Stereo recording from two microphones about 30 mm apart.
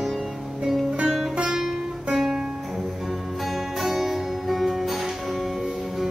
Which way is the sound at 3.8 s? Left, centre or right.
Centre.